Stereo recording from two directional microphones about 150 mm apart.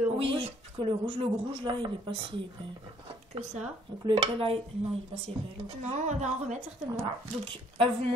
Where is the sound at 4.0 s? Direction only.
35° right (ahead or behind).